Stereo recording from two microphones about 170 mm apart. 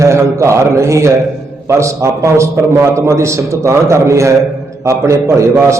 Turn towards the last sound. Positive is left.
turn(degrees=-15)  # may be behind; listen again after turning